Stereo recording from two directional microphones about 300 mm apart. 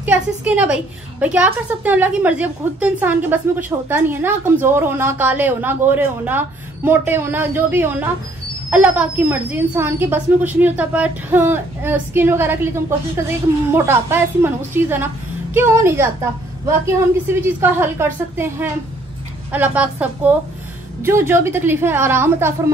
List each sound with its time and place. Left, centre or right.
0.0 s a woman's voice: centre